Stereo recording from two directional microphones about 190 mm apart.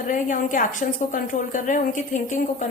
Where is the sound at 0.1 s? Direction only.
45° left (ahead or behind).